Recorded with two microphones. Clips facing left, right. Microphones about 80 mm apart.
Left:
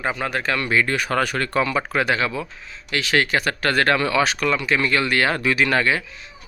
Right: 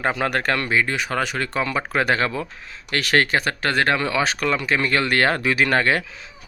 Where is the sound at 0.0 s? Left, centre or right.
Right.